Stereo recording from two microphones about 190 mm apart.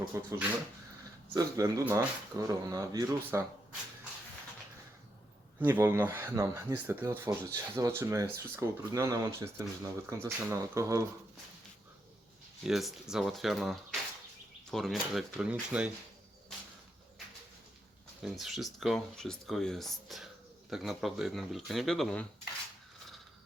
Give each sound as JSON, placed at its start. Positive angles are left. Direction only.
{"t": 0.1, "sound": "speech", "side_deg": -15}
{"t": 5.5, "sound": "speech", "side_deg": -10}
{"t": 12.6, "sound": "speech", "side_deg": 0}
{"t": 18.2, "sound": "speech", "side_deg": 0}